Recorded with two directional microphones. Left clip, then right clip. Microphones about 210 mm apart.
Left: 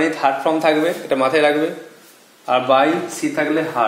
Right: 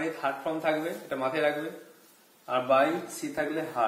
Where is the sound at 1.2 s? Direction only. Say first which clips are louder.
Left 12 dB; 40° left (ahead or behind).